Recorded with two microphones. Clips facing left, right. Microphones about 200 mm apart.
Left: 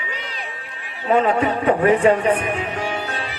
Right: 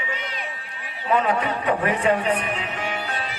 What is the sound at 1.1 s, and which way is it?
Speech, 45° left (ahead or behind).